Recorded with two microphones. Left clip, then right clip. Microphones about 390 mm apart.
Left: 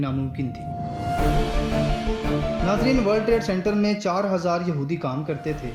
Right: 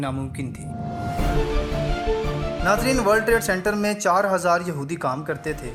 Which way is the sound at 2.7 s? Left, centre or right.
Centre.